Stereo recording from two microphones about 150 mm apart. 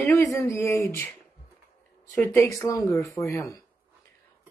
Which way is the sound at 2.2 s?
20° left (ahead or behind).